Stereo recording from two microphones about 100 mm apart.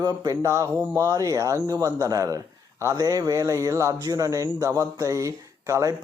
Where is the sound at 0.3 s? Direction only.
30° right (ahead or behind).